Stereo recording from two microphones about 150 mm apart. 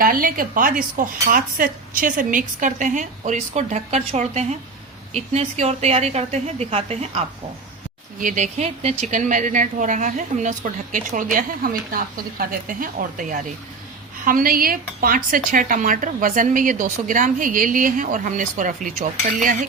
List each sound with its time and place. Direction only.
0.0 s a woman's voice: 70° right (ahead or behind); by 7.3 s 45° right (ahead or behind)
8.2 s a woman's voice: 60° right (ahead or behind)